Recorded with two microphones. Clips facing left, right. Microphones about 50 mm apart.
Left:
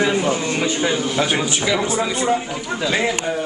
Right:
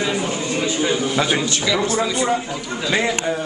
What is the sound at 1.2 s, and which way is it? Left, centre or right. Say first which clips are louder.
A man's voice: even; centre.